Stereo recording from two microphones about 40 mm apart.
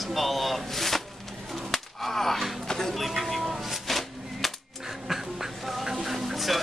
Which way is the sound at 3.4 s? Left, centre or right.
Centre.